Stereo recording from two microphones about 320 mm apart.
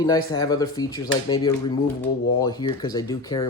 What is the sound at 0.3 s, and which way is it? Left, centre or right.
Speech, centre.